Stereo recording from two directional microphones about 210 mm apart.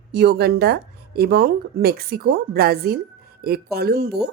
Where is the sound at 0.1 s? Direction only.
50° right (ahead or behind).